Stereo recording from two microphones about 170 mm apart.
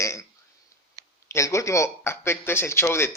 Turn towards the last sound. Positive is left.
turn(degrees=15)  # may be behind; listen again after turning